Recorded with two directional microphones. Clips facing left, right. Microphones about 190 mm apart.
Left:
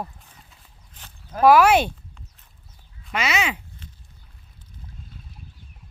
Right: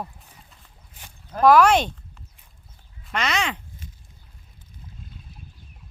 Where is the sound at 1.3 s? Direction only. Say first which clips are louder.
Left 1 dB; 5° left (ahead or behind).